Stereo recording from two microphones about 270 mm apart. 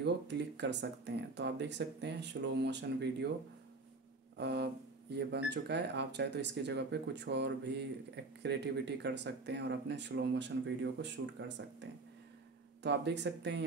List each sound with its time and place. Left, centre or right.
0.0 s speech: right
4.4 s speech: right
12.8 s speech: right